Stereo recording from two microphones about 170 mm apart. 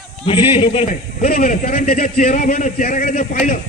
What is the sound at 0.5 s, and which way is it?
Speech, 35° left (ahead or behind).